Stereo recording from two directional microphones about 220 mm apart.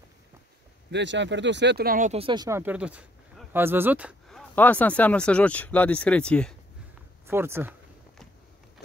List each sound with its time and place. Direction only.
0.9 s speech: 55° right (ahead or behind); by 4.1 s 10° right (ahead or behind)
4.3 s speech: 5° left (ahead or behind)
7.2 s speech: 10° right (ahead or behind)